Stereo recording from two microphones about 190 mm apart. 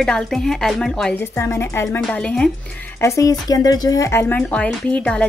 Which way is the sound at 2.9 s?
15° left (ahead or behind).